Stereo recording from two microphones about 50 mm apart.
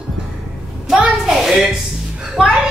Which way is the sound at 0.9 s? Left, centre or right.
Centre.